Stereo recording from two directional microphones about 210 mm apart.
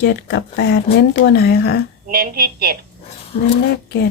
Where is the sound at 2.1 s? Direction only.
45° right (ahead or behind).